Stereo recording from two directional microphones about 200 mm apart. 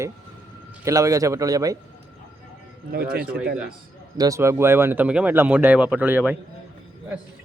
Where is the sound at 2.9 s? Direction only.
50° right (ahead or behind).